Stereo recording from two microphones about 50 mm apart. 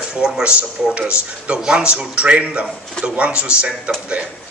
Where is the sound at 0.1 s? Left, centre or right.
Centre.